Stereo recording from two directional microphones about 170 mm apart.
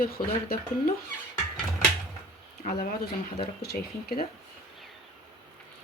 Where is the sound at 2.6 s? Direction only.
50° left (ahead or behind).